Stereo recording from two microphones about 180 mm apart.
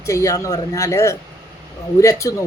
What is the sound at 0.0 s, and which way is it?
Speech, 15° left (ahead or behind).